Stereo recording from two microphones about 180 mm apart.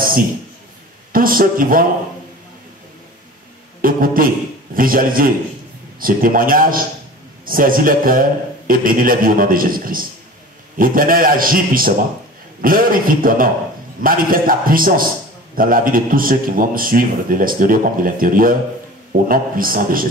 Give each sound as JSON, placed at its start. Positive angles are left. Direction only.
{"t": 1.1, "sound": "a man's voice", "side_deg": -50}
{"t": 3.8, "sound": "a sound", "side_deg": -50}
{"t": 4.7, "sound": "a man's voice", "side_deg": -50}